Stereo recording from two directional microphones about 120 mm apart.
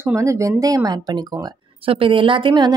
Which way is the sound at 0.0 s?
25° right (ahead or behind).